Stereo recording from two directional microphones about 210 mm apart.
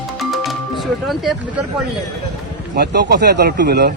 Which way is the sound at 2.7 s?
55° right (ahead or behind).